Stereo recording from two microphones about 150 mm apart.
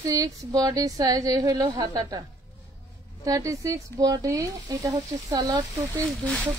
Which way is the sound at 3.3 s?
20° right (ahead or behind).